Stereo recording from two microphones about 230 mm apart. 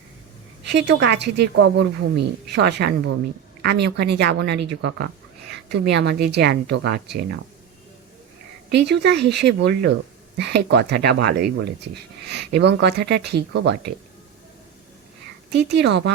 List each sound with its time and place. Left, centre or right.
0.7 s speech: right
8.7 s speech: right
15.5 s speech: right